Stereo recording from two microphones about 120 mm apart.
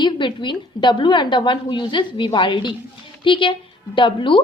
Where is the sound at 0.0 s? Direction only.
45° left (ahead or behind).